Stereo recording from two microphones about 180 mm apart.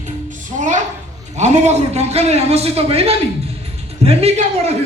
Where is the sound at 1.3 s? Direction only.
40° right (ahead or behind).